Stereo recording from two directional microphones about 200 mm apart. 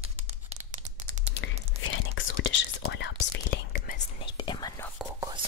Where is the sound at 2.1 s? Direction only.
70° left (ahead or behind); by 3.9 s 50° left (ahead or behind).